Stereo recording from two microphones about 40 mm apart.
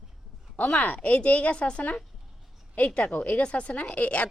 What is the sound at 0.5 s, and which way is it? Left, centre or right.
A woman's voice, left.